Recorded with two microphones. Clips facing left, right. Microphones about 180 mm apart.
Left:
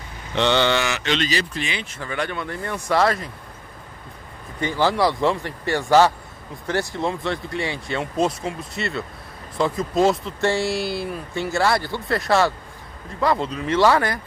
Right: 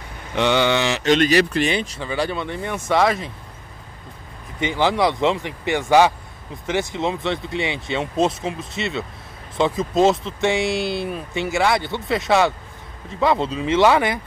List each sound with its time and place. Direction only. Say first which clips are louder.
0.3 s a sound: right 1 dB; 10° right (ahead or behind)
1.0 s speech: right 7 dB; 50° right (ahead or behind)
2.0 s speech: right 3 dB; 30° right (ahead or behind)
4.6 s speech: right 1 dB; 20° right (ahead or behind)